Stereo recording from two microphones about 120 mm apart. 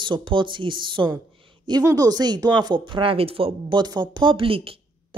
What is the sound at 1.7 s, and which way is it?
Speech, 30° right (ahead or behind).